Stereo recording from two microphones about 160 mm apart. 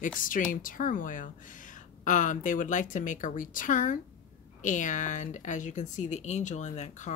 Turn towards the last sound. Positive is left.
turn(degrees=50)  # may be behind; listen again after turning